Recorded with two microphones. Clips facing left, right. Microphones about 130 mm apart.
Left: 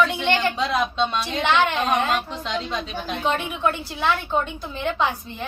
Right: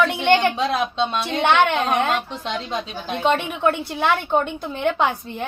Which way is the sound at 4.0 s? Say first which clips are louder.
Right 2 dB; 55° right (ahead or behind).